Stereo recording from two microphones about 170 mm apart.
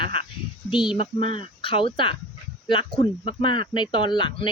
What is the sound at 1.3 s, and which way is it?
Speech, 30° left (ahead or behind).